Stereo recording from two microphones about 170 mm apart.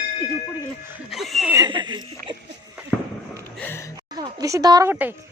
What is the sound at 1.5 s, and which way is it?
Speech, 25° right (ahead or behind).